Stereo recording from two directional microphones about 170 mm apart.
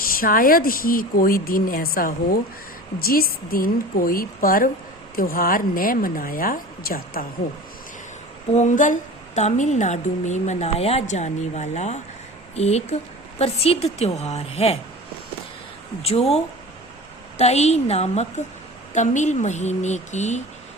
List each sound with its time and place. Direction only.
0.2 s speech: 55° left (ahead or behind)
8.5 s a woman's voice: 45° left (ahead or behind)
16.0 s a woman's voice: 35° left (ahead or behind)